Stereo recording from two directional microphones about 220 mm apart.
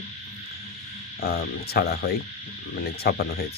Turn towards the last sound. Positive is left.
turn(degrees=45)  # may be behind; listen again after turning